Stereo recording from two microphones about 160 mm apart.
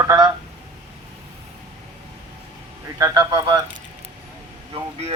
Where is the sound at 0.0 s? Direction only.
20° right (ahead or behind).